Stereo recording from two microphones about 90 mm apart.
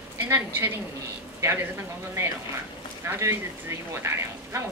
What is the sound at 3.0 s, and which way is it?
A woman's voice, 30° right (ahead or behind).